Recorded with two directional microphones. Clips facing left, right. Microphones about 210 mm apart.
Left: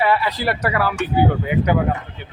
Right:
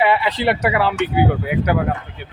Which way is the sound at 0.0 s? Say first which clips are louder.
Right 2 dB; 25° right (ahead or behind).